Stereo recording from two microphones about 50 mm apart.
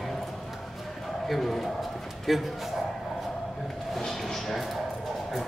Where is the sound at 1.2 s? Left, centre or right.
Centre.